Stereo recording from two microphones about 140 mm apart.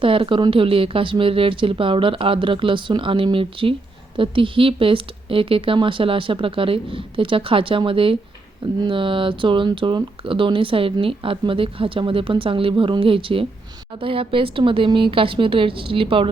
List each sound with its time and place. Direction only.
0.0 s speech: 40° right (ahead or behind)